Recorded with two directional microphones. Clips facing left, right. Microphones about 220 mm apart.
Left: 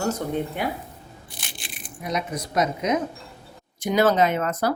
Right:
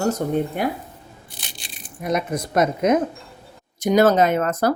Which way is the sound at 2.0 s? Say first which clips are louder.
Right 5 dB; 50° right (ahead or behind).